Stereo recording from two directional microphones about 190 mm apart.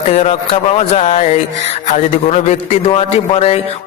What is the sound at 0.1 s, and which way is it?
A man's voice, 35° left (ahead or behind).